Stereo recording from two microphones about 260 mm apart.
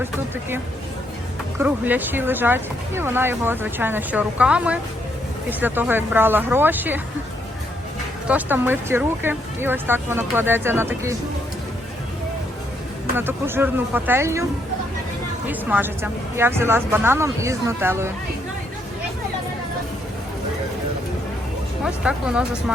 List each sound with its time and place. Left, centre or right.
1.5 s speech: centre
8.3 s speech: centre
13.1 s speech: centre
15.4 s speech: centre
21.8 s speech: centre